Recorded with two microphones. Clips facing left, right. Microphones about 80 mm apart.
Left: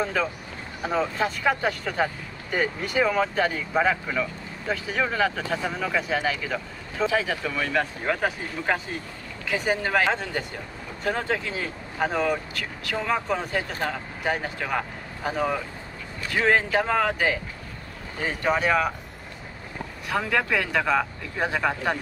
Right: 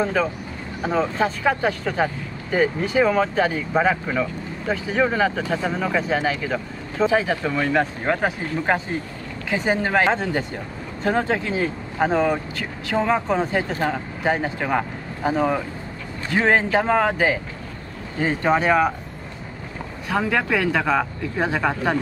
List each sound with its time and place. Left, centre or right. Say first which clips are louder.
1.5 s speech: right 3 dB; centre
1.9 s speech: right 4 dB; centre
2.5 s speech: right 5 dB; right
3.1 s speech: right 4 dB; centre
5.9 s speech: right 3 dB; right
6.2 s speech: right 4 dB; centre
20.1 s speech: right 3 dB; centre